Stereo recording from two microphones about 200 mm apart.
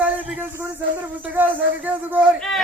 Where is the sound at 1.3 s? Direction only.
10° right (ahead or behind).